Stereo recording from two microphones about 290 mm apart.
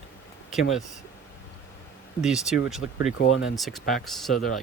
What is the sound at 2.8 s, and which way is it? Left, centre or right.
Speech, left.